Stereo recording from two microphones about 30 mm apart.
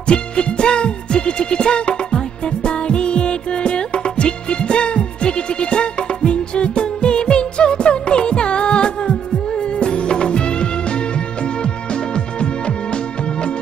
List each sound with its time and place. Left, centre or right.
0.0 s music: left